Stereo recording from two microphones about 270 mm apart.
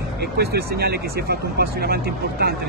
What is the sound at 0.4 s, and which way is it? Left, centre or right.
Speech, right.